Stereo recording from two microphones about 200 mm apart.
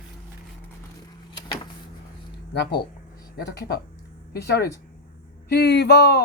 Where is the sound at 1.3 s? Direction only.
25° left (ahead or behind).